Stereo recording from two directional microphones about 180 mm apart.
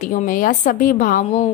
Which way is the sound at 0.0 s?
50° left (ahead or behind).